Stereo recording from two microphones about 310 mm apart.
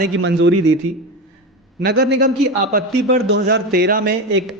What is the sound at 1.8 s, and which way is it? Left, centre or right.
A man's voice, right.